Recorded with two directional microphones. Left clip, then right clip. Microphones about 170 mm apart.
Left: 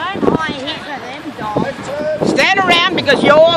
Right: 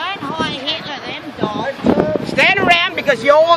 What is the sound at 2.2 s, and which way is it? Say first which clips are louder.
Speech: left 2 dB; 50° right (ahead or behind).